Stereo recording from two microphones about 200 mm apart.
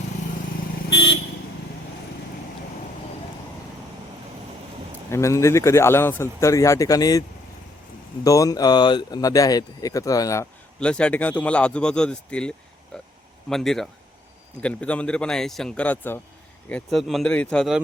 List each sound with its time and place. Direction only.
0.9 s vehicle: 55° left (ahead or behind)
5.1 s speech: 15° left (ahead or behind)
10.8 s speech: 5° left (ahead or behind)